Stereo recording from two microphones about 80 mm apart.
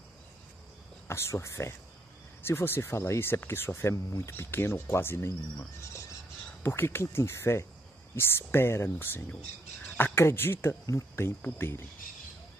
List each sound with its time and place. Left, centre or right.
1.0 s speech: left